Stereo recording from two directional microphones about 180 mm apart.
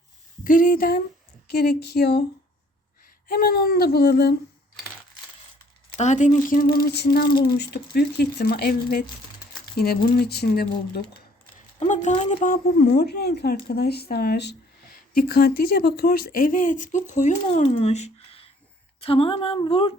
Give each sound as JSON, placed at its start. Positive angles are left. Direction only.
{"t": 0.4, "sound": "speech", "side_deg": 50}
{"t": 1.5, "sound": "speech", "side_deg": 60}
{"t": 3.2, "sound": "speech", "side_deg": 55}
{"t": 6.0, "sound": "speech", "side_deg": 40}
{"t": 12.1, "sound": "speech", "side_deg": 30}
{"t": 12.4, "sound": "speech", "side_deg": 50}